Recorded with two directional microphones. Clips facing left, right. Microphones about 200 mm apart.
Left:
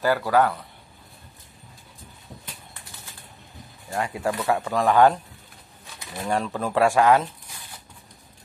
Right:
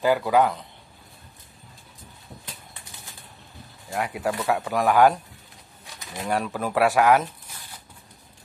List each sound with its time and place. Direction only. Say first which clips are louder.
0.0 s speech: right 1 dB; 15° right (ahead or behind)
3.9 s speech: even; 10° right (ahead or behind)
6.2 s speech: left 1 dB; 5° right (ahead or behind)